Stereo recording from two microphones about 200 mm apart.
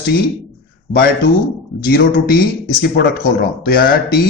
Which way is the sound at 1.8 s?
50° left (ahead or behind).